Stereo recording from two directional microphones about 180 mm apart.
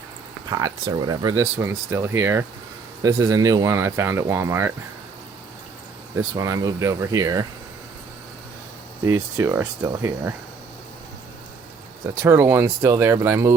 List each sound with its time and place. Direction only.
0.5 s speech: 20° right (ahead or behind)
6.1 s speech: 20° right (ahead or behind)
9.0 s speech: 15° right (ahead or behind)
12.2 s speech: 15° right (ahead or behind)